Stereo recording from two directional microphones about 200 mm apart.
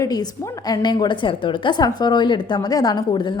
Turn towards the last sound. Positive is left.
turn(degrees=25)  # may be behind; listen again after turning